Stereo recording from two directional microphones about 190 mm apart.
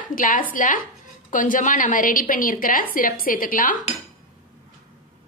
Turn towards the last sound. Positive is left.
turn(degrees=45)  # may be behind; listen again after turning